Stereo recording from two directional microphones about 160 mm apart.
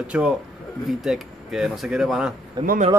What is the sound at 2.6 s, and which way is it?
Speech, 25° right (ahead or behind).